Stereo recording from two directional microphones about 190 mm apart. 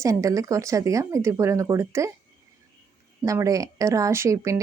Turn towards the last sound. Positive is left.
turn(degrees=-15)  # may be behind; listen again after turning